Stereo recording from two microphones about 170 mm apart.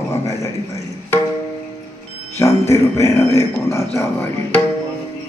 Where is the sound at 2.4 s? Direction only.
15° left (ahead or behind).